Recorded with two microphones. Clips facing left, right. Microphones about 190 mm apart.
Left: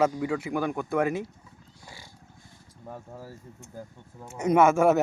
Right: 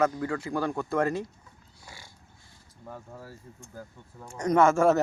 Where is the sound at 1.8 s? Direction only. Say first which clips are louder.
Left 1 dB; 15° left (ahead or behind).